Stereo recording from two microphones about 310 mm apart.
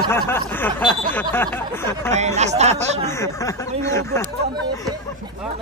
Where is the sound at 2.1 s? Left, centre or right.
Right.